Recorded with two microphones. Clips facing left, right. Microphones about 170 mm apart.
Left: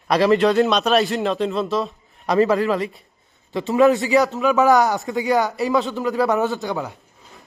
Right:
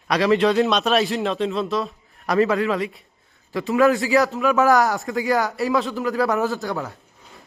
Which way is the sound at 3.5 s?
25° left (ahead or behind).